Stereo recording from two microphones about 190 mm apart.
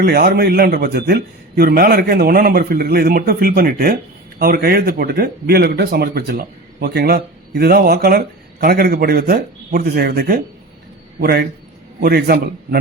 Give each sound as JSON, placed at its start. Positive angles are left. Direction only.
{"t": 0.0, "sound": "a man's voice", "side_deg": -55}